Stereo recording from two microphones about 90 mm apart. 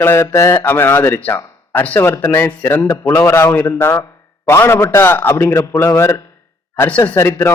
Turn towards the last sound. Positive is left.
turn(degrees=25)  # may be behind; listen again after turning